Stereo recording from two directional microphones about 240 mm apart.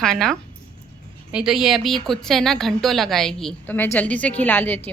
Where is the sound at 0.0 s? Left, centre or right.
Centre.